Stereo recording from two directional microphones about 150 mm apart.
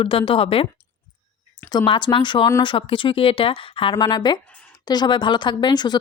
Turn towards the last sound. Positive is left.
turn(degrees=30)  # may be behind; listen again after turning